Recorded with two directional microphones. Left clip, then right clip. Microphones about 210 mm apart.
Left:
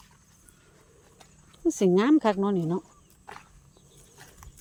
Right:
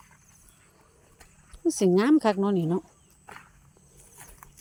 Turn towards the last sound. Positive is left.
turn(degrees=-20)  # may be behind; listen again after turning